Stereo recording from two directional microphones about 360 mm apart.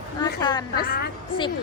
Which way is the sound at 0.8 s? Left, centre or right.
Left.